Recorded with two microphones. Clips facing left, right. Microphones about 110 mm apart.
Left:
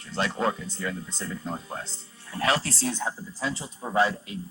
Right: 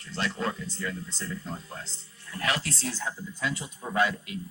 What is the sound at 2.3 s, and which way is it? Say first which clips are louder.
Speech: left 5 dB; 30° left (ahead or behind).